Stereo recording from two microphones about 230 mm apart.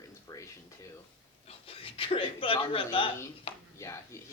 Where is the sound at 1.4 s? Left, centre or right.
Left.